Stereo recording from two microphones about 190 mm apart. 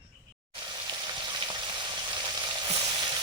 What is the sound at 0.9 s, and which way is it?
Frying, 25° right (ahead or behind).